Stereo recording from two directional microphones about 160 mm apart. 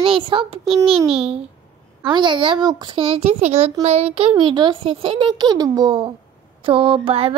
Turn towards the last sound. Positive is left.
turn(degrees=-35)  # may be behind; listen again after turning